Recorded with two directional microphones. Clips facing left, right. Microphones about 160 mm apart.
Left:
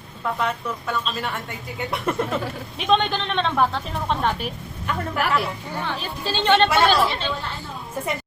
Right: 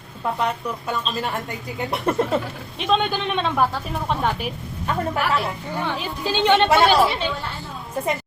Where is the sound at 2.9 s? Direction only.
5° right (ahead or behind).